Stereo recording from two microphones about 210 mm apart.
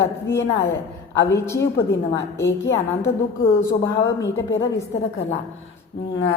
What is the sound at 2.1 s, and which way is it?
Speech, 60° left (ahead or behind).